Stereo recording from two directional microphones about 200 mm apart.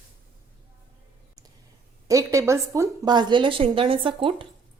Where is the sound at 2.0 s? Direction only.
15° right (ahead or behind).